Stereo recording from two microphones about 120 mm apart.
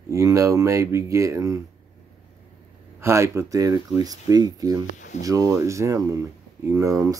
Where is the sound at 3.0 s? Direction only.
20° right (ahead or behind).